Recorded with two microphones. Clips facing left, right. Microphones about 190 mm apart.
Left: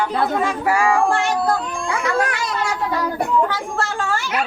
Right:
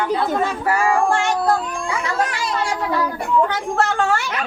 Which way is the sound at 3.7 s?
65° right (ahead or behind).